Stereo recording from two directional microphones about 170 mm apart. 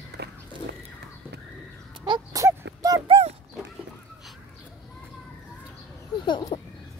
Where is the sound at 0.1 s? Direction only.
70° right (ahead or behind).